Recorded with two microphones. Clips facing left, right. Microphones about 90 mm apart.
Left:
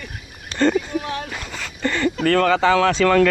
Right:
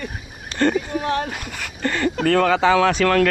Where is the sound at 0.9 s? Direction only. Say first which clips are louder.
Right 3 dB; 45° right (ahead or behind).